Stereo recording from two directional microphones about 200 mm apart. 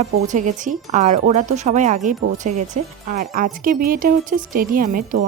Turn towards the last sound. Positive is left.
turn(degrees=-45)  # may be behind; listen again after turning